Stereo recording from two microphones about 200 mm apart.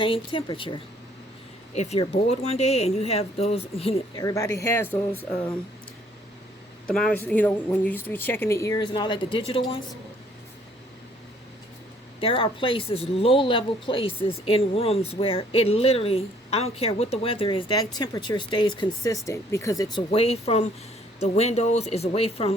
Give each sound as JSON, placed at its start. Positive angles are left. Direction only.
{"t": 0.0, "sound": "speech", "side_deg": 25}
{"t": 4.2, "sound": "speech", "side_deg": 15}
{"t": 6.8, "sound": "speech", "side_deg": 5}
{"t": 12.2, "sound": "speech", "side_deg": 25}